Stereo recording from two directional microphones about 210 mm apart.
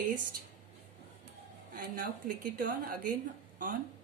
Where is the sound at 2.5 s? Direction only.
45° right (ahead or behind).